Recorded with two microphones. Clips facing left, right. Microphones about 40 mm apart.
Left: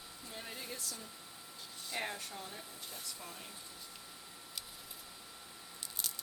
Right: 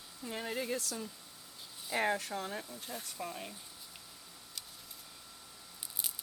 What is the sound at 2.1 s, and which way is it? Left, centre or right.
Speech, right.